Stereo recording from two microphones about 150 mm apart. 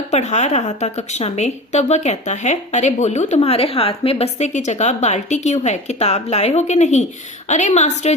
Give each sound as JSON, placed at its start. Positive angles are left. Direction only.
{"t": 0.1, "sound": "a woman's voice", "side_deg": 50}